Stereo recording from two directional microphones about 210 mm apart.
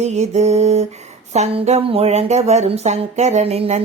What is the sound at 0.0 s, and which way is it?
Speech, 30° right (ahead or behind).